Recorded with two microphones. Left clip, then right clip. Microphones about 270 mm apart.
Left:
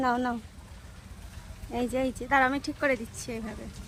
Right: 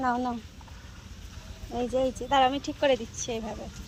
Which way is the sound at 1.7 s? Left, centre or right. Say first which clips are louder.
Right 2 dB; centre.